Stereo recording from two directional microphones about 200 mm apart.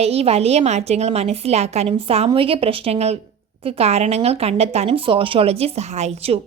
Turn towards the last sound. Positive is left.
turn(degrees=-30)  # may be behind; listen again after turning